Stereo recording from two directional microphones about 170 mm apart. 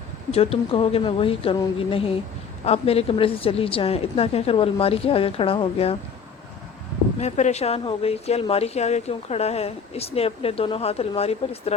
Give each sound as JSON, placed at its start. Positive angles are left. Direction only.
{"t": 0.3, "sound": "speech", "side_deg": 35}
{"t": 7.2, "sound": "speech", "side_deg": 40}